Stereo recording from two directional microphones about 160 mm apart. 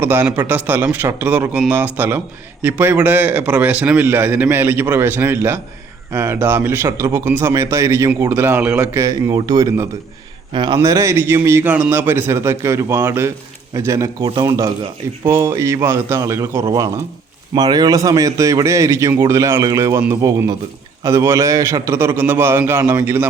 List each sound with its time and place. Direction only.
0.0 s a man's voice: 10° right (ahead or behind); by 10.8 s 30° right (ahead or behind)
10.8 s a man's voice: 20° right (ahead or behind)